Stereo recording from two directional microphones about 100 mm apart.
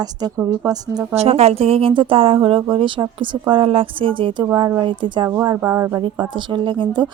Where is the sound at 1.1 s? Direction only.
90° right; by 5.2 s 55° right (ahead or behind).